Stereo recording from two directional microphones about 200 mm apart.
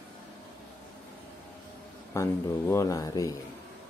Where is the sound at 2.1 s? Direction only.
15° left (ahead or behind).